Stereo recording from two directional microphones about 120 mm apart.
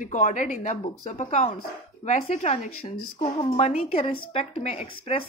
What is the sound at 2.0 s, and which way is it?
Speech, 85° left.